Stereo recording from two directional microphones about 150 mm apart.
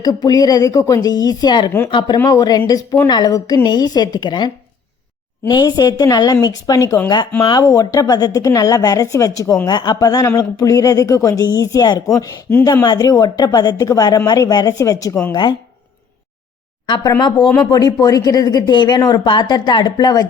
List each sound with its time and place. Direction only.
0.0 s speech: 25° left (ahead or behind)
16.8 s speech: 30° left (ahead or behind)